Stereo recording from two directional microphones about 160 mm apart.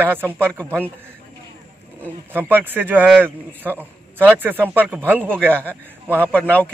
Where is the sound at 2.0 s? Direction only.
10° right (ahead or behind).